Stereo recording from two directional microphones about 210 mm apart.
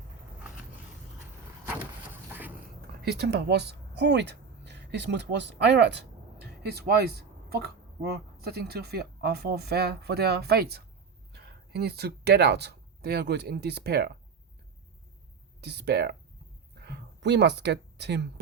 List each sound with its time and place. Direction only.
3.0 s speech: 50° right (ahead or behind)
15.6 s speech: 50° right (ahead or behind)
16.7 s a sound: 50° right (ahead or behind)